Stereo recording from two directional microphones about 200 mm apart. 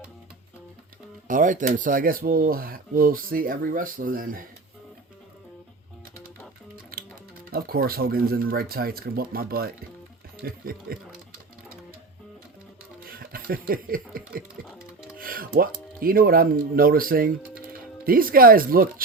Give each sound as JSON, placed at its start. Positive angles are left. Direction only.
{"t": 1.3, "sound": "speech", "side_deg": -40}
{"t": 6.9, "sound": "music", "side_deg": -50}
{"t": 7.5, "sound": "speech", "side_deg": -45}
{"t": 13.1, "sound": "a sound", "side_deg": -50}
{"t": 15.2, "sound": "speech", "side_deg": -45}